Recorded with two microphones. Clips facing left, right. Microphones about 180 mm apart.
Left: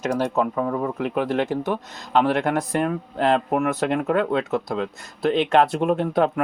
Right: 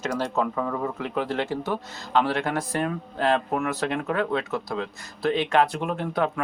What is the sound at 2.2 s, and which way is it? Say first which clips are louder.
Speech: left 5 dB; 55° left (ahead or behind).